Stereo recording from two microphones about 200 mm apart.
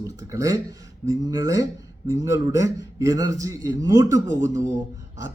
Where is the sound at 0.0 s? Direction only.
15° right (ahead or behind).